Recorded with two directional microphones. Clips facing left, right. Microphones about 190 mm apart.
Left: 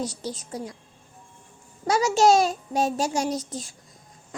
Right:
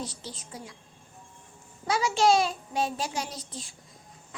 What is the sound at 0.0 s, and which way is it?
Speech, 40° left (ahead or behind).